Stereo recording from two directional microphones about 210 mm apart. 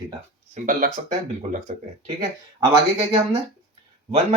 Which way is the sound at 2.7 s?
20° right (ahead or behind).